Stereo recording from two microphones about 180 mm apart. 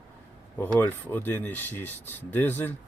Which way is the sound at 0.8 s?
10° left (ahead or behind).